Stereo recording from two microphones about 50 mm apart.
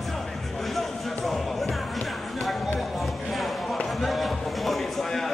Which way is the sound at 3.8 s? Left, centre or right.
Centre.